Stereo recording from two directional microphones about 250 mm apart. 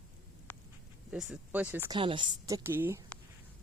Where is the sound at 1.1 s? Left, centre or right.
Centre.